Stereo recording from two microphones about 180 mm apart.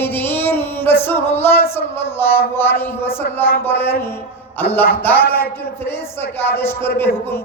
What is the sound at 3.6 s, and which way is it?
A man's voice, 10° left (ahead or behind).